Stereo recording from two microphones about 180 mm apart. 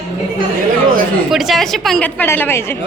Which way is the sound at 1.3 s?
Centre (ahead or behind).